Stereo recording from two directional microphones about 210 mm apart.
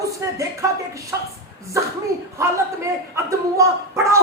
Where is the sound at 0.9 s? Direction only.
15° right (ahead or behind).